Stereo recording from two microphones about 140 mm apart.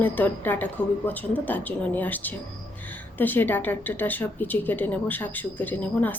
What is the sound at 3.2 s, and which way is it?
A woman's voice, 15° left (ahead or behind).